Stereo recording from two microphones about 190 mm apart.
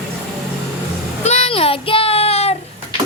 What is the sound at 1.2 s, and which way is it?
Child singing, 35° left (ahead or behind).